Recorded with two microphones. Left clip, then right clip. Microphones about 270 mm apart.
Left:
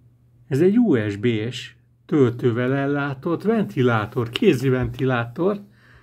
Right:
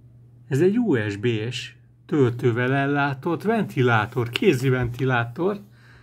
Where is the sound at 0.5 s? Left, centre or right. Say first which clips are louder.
Left 3 dB; centre.